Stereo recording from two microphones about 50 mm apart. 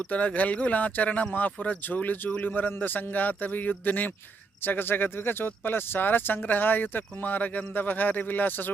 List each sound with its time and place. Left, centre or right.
0.1 s speech: left